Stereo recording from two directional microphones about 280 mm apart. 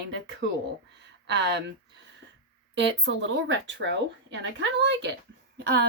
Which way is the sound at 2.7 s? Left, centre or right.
Right.